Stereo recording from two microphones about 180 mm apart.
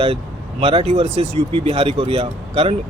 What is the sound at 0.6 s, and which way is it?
Speech, 35° right (ahead or behind).